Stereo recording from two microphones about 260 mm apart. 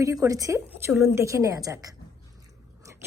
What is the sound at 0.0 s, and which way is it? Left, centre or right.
A woman's voice, centre.